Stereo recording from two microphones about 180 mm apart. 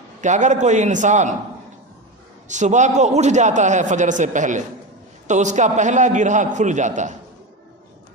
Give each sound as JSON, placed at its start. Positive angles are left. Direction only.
{"t": 0.2, "sound": "a man's voice", "side_deg": -40}
{"t": 2.5, "sound": "a man's voice", "side_deg": -40}